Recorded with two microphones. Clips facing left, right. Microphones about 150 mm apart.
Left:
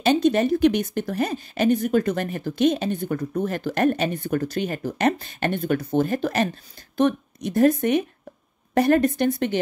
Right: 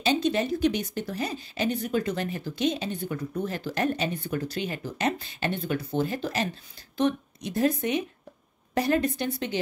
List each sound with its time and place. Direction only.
0.0 s a woman's voice: 50° left (ahead or behind)